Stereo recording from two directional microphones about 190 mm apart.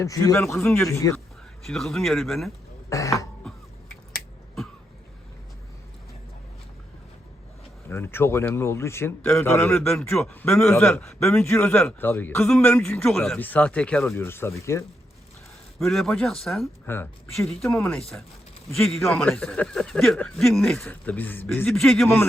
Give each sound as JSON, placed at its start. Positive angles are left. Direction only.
{"t": 0.0, "sound": "a man's voice", "side_deg": 15}
{"t": 1.6, "sound": "speech", "side_deg": 0}
{"t": 2.9, "sound": "a man's voice", "side_deg": 15}
{"t": 7.9, "sound": "a man's voice", "side_deg": 10}
{"t": 10.6, "sound": "a man's voice", "side_deg": 15}
{"t": 10.8, "sound": "a man's voice", "side_deg": 5}
{"t": 15.8, "sound": "speech", "side_deg": 0}
{"t": 22.0, "sound": "a man's voice", "side_deg": 10}